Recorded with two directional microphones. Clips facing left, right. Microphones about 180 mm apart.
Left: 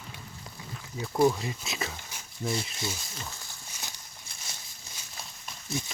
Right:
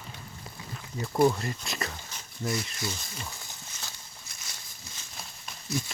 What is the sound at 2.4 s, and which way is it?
Speech, 25° left (ahead or behind).